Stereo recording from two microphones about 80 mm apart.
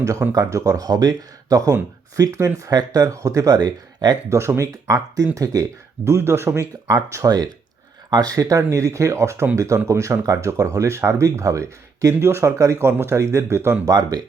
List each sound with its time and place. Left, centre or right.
0.0 s speech: right
2.7 s speech: right
4.3 s speech: right
6.1 s speech: right
7.3 s speech: right
13.8 s speech: right